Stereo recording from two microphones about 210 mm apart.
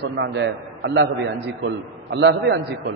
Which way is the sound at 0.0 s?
55° right (ahead or behind).